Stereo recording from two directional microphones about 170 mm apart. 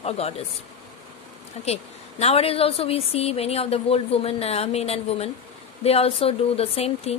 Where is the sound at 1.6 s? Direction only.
40° left (ahead or behind).